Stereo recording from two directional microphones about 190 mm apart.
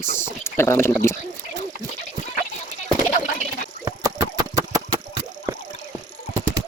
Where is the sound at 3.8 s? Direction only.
20° right (ahead or behind).